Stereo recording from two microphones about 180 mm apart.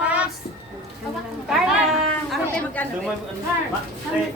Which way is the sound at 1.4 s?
Centre (ahead or behind).